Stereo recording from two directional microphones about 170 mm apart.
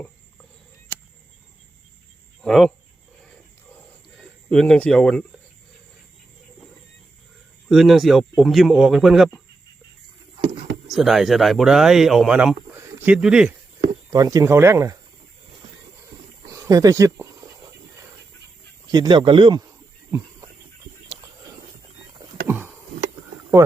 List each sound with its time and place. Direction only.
2.4 s speech: centre (ahead or behind)
4.2 s speech: 5° left (ahead or behind)
7.7 s speech: centre (ahead or behind)
10.8 s speech: centre (ahead or behind)
12.7 s a sound: 10° right (ahead or behind)
14.1 s speech: 20° right (ahead or behind)
16.5 s snake: 20° right (ahead or behind)
18.9 s speech: 25° right (ahead or behind)
20.1 s a sound: 15° right (ahead or behind)
23.6 s speech: 20° right (ahead or behind)